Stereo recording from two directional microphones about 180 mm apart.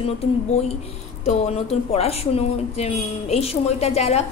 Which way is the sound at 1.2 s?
35° left (ahead or behind).